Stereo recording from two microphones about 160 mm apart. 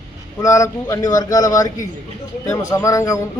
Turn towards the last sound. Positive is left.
turn(degrees=20)  # may be behind; listen again after turning